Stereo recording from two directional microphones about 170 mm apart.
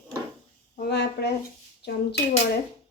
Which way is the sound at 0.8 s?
80° left.